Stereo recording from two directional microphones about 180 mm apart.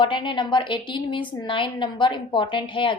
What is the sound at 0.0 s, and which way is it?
A woman's voice, 25° left (ahead or behind).